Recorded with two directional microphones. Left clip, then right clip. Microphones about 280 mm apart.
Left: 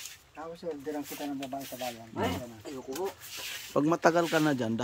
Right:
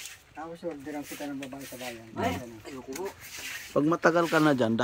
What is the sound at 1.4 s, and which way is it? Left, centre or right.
Speech, centre.